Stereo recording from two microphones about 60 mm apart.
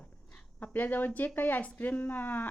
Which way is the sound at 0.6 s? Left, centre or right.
Left.